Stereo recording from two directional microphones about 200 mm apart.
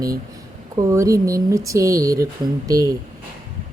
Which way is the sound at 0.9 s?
15° right (ahead or behind).